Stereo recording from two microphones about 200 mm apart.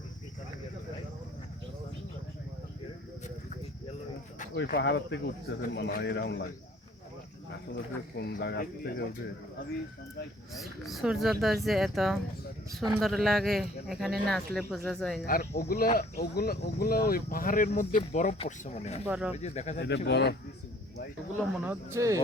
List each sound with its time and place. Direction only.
4.5 s speech: 55° left (ahead or behind)
7.7 s speech: 55° left (ahead or behind)
10.5 s speech: centre (ahead or behind)
15.3 s speech: 50° left (ahead or behind); by 19.0 s 35° left (ahead or behind)
19.0 s speech: 5° right (ahead or behind)
19.4 s speech: 35° left (ahead or behind)
20.1 s speech: 55° left (ahead or behind)
21.6 s speech: 10° right (ahead or behind)